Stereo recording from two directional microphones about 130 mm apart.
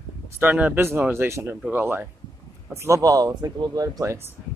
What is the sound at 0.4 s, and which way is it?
Speech, 10° right (ahead or behind).